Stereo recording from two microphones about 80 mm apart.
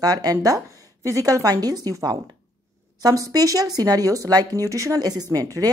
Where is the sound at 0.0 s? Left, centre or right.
Right.